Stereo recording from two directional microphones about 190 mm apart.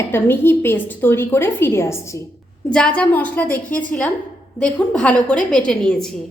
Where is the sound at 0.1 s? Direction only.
10° left (ahead or behind).